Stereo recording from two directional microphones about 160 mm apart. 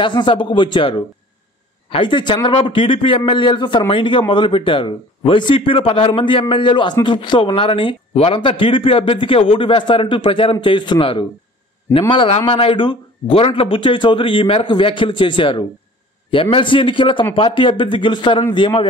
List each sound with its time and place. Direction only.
0.0 s speech: 30° left (ahead or behind)